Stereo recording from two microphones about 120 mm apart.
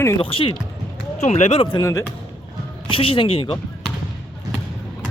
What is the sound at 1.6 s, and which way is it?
Speech, 40° left (ahead or behind).